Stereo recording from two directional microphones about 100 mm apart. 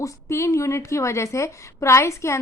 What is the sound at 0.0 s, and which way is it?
A woman's voice, 30° left (ahead or behind).